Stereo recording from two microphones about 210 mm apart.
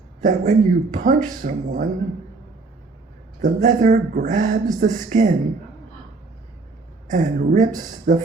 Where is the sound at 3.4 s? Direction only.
35° right (ahead or behind).